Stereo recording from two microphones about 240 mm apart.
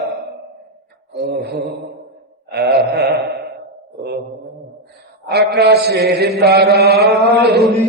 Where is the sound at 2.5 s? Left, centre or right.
Right.